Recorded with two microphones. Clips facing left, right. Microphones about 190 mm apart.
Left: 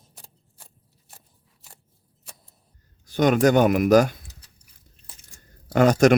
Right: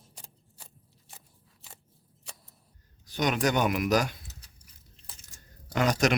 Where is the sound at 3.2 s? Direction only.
50° left (ahead or behind).